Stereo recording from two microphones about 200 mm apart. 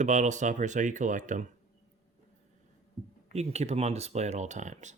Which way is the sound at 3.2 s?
35° right (ahead or behind).